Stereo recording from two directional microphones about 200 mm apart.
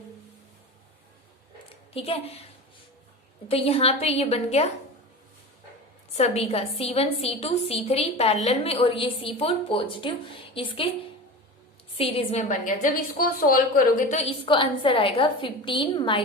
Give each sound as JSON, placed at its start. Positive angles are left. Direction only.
{"t": 1.7, "sound": "a woman's voice", "side_deg": 30}
{"t": 3.5, "sound": "a woman's voice", "side_deg": 30}
{"t": 6.1, "sound": "a woman's voice", "side_deg": 30}